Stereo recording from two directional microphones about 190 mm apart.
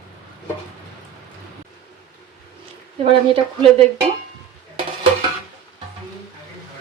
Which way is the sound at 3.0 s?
30° right (ahead or behind).